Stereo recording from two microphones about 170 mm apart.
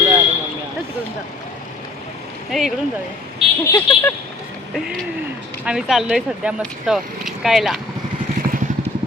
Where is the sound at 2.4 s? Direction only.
Centre (ahead or behind).